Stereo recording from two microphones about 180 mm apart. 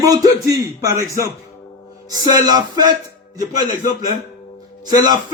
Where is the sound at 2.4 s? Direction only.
20° right (ahead or behind).